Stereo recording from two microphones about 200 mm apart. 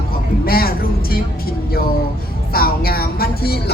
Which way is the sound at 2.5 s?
50° left (ahead or behind).